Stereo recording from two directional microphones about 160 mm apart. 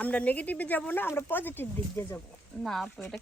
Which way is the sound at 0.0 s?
10° left (ahead or behind).